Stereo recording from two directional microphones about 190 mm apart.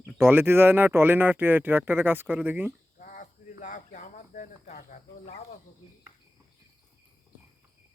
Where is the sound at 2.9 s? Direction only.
45° left (ahead or behind).